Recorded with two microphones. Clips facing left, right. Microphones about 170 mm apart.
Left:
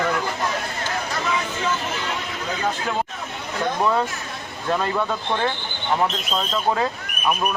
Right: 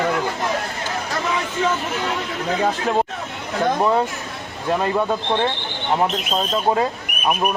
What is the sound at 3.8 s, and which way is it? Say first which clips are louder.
Speech: right 3 dB; 20° right (ahead or behind).